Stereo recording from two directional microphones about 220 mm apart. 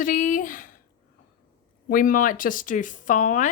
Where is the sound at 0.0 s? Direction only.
35° left (ahead or behind).